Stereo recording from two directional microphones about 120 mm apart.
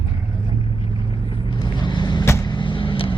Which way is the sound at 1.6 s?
40° left (ahead or behind).